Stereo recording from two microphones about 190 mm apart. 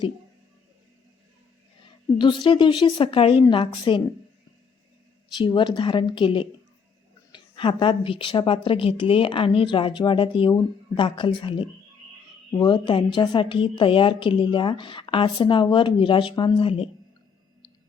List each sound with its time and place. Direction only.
2.1 s a woman's voice: 25° left (ahead or behind)
5.4 s a woman's voice: 25° left (ahead or behind)